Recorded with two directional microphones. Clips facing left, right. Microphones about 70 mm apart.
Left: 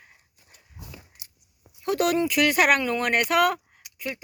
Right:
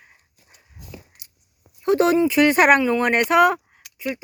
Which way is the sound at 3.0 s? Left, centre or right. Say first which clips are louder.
Right 5 dB; right.